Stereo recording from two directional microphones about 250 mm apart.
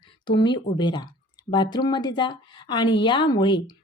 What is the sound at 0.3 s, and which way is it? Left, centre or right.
A woman's voice, centre.